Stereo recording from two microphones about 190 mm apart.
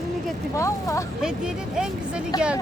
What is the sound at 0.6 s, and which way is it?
Speech, 15° left (ahead or behind).